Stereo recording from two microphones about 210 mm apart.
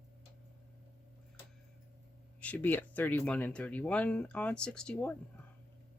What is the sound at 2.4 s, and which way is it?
Speech, 5° left (ahead or behind).